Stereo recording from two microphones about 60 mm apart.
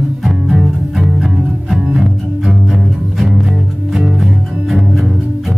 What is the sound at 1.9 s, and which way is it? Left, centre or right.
Double bass, centre.